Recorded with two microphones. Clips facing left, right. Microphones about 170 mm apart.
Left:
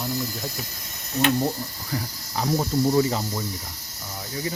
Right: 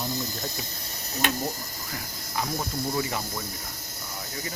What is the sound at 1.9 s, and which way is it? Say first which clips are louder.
Speech: left 4 dB; 30° left (ahead or behind).